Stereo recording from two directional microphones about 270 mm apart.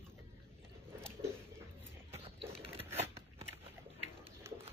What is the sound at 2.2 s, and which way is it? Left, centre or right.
Biting, right.